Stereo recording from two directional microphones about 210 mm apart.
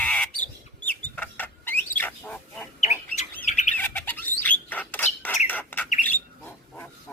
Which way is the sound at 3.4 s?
35° left (ahead or behind).